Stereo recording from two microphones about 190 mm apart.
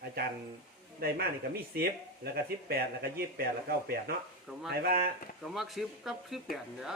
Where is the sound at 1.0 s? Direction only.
55° right (ahead or behind).